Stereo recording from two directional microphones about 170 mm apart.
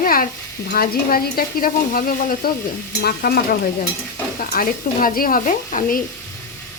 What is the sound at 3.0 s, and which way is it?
Stir, 65° left (ahead or behind).